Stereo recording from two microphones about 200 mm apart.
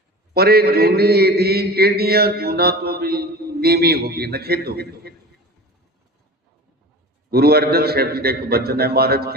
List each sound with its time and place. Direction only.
0.3 s mantra: 50° right (ahead or behind)
7.3 s mantra: 50° right (ahead or behind)